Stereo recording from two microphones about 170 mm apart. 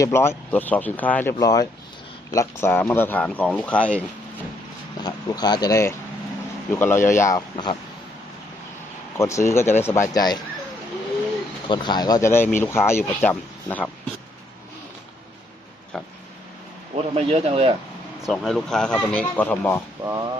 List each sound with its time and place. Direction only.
0.0 s speech: 15° left (ahead or behind)
5.0 s speech: 25° left (ahead or behind)
9.1 s speech: 15° left (ahead or behind)
11.7 s speech: 25° left (ahead or behind); by 13.9 s 10° left (ahead or behind)
16.9 s a man's voice: 40° right (ahead or behind)
18.3 s speech: centre (ahead or behind)
20.1 s speech: 20° right (ahead or behind)